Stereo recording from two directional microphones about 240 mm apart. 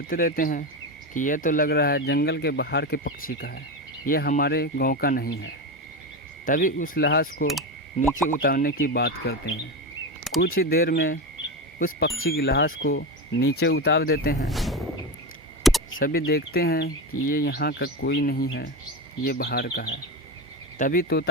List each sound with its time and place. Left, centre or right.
0.1 s speech: left
12.2 s speech: left
14.5 s a sound: centre
16.0 s speech: left